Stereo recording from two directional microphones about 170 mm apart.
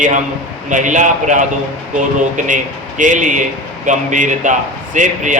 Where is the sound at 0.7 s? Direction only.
45° right (ahead or behind).